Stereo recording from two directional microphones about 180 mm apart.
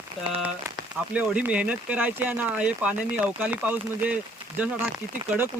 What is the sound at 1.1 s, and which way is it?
Speech, 5° right (ahead or behind).